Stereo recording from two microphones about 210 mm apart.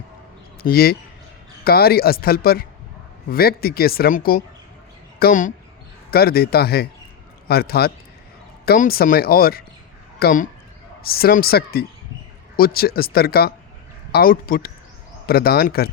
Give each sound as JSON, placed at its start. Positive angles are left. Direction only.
{"t": 0.6, "sound": "speech", "side_deg": 45}